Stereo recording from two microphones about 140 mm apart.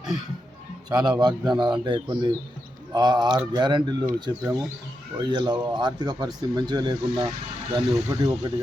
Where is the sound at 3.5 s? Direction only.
30° right (ahead or behind).